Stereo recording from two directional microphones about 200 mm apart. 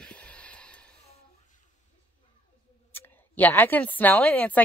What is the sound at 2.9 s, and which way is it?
A woman's voice, 10° left (ahead or behind).